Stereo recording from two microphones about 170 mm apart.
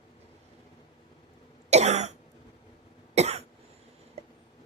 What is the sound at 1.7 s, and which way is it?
Cough, 40° right (ahead or behind).